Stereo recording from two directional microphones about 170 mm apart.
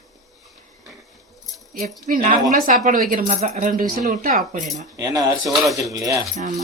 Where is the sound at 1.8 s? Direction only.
55° right (ahead or behind).